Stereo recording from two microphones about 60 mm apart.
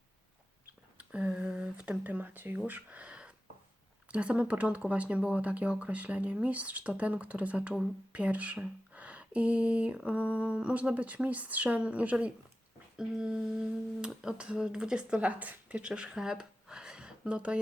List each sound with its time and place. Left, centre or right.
0.9 s a sound: centre
2.6 s speech: right
13.0 s humming: centre
14.2 s speech: centre